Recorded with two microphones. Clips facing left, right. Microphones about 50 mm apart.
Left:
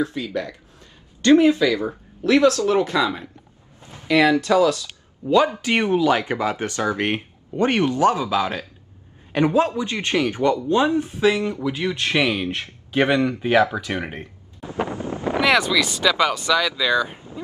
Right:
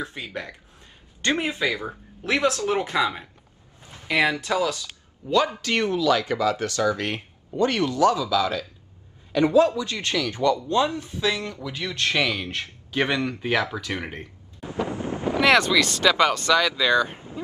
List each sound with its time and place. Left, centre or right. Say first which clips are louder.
0.0 s speech: left 8 dB; right; by 4.8 s centre
5.2 s speech: left 4 dB; centre
15.4 s wind noise: even; centre
15.8 s speech: even; centre